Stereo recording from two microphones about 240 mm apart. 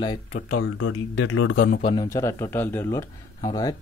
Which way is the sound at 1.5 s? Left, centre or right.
Left.